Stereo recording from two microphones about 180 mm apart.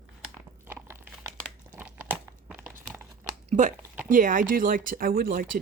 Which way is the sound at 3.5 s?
45° right (ahead or behind).